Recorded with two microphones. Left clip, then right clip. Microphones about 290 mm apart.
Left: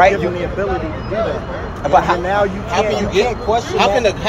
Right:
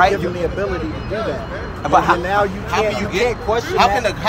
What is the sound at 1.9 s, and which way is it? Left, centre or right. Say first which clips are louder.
Speech: left 1 dB; centre.